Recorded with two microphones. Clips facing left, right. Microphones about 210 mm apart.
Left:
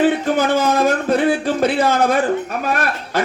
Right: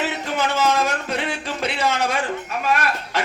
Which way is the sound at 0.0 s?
50° left (ahead or behind).